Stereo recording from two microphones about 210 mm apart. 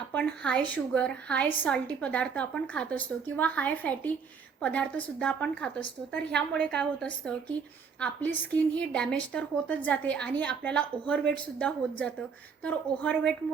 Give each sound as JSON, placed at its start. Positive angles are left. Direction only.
{"t": 0.1, "sound": "a woman's voice", "side_deg": 5}